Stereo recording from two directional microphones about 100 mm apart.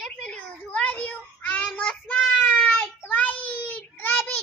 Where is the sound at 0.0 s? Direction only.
5° left (ahead or behind).